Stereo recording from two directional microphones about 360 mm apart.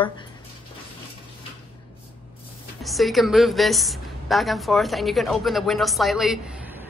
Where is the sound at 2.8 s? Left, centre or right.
Centre.